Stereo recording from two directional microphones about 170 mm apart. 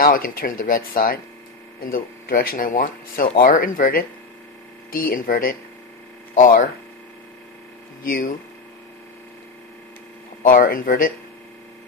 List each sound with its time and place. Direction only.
0.0 s speech: 55° left (ahead or behind)
8.1 s speech: 55° left (ahead or behind)
10.4 s speech: 55° left (ahead or behind)